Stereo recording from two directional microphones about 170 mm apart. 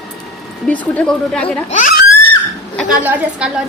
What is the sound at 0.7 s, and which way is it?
Speech, 5° left (ahead or behind).